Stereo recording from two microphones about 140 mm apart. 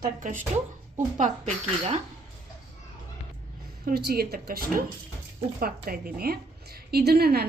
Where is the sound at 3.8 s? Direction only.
90° right.